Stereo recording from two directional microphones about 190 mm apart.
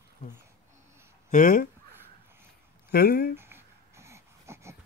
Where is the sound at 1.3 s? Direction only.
45° left (ahead or behind).